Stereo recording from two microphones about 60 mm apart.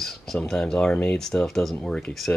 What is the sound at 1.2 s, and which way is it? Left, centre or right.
Speech, centre.